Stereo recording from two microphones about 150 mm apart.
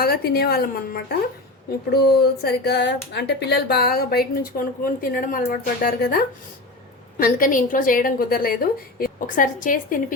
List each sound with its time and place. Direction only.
0.0 s a woman's voice: 90° left; by 10.2 s 65° left (ahead or behind)